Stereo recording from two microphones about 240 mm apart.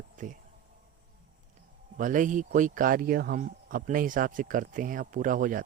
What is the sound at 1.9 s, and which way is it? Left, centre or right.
Speech, right.